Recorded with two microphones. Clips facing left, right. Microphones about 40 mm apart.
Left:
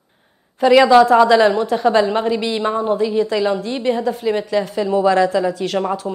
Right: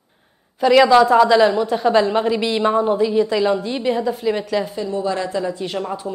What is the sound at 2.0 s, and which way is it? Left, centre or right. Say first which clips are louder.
A woman's voice: left 1 dB; centre.